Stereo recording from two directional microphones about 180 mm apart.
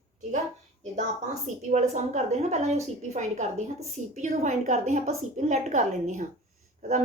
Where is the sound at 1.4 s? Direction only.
40° right (ahead or behind).